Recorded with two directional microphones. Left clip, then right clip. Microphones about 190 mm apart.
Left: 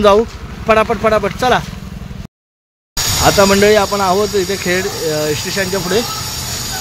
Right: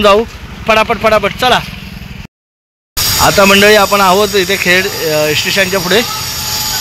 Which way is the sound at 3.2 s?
15° right (ahead or behind).